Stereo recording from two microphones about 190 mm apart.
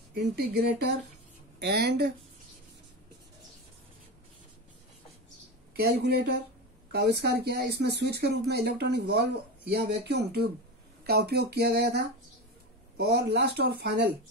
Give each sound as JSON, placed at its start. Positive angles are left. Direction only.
{"t": 0.1, "sound": "speech", "side_deg": -55}
{"t": 5.8, "sound": "speech", "side_deg": -55}